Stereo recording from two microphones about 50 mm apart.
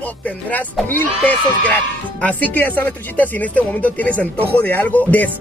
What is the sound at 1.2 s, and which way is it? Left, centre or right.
Speech, left.